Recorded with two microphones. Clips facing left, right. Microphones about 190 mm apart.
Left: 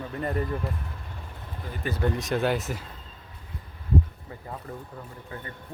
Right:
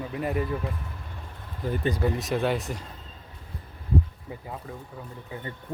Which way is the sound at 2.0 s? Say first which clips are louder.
Left 4 dB; centre (ahead or behind).